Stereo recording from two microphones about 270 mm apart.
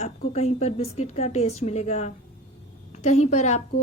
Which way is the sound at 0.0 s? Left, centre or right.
Left.